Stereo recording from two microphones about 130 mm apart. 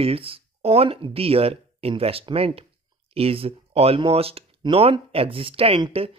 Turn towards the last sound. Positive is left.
turn(degrees=-45)  # may be behind; listen again after turning